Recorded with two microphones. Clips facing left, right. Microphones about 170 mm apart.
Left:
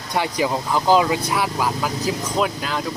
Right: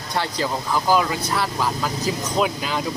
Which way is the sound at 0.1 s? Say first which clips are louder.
Left 3 dB; 15° left (ahead or behind).